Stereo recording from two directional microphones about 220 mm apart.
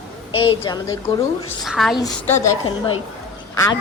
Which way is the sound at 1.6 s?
Centre (ahead or behind).